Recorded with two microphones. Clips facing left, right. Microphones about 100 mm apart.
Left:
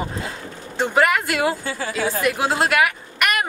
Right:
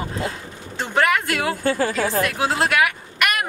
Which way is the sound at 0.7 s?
5° left (ahead or behind).